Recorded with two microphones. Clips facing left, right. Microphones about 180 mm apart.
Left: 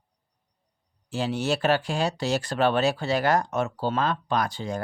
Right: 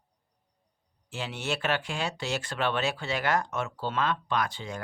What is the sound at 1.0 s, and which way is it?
Speech, 35° left (ahead or behind).